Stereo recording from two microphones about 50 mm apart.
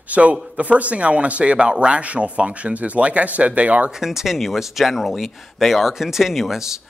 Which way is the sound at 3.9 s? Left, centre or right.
Centre.